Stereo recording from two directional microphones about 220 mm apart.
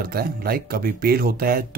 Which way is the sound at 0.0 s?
45° right (ahead or behind).